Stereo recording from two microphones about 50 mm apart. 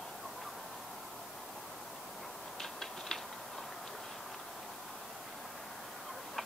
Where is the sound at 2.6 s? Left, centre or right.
Centre.